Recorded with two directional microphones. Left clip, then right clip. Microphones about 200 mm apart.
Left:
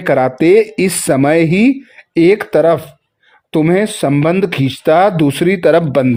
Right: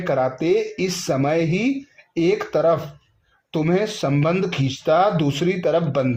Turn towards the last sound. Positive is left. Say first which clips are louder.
# left 9 dB
turn(degrees=50)  # may be behind; listen again after turning